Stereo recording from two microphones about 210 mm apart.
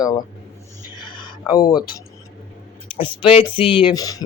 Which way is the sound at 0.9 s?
20° left (ahead or behind).